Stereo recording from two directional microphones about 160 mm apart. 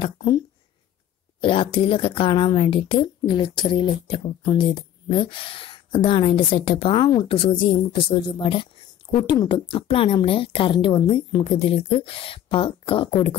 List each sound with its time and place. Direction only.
0.0 s speech: 25° left (ahead or behind)
1.4 s a woman's voice: 35° left (ahead or behind)